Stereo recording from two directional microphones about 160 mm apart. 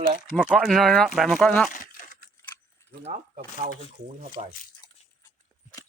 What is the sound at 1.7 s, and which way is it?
Crumpling, 55° left (ahead or behind).